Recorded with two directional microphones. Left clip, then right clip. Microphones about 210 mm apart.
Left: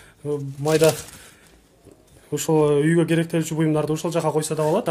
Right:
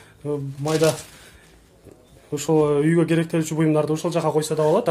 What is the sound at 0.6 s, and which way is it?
Speech, 20° left (ahead or behind).